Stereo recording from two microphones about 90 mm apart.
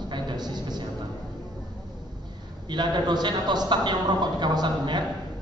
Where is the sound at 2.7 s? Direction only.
55° right (ahead or behind).